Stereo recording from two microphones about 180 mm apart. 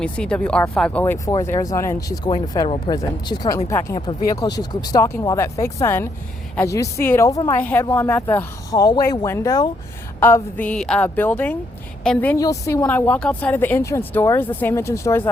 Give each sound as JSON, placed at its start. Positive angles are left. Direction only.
{"t": 0.0, "sound": "speech", "side_deg": 5}
{"t": 12.4, "sound": "speech", "side_deg": 20}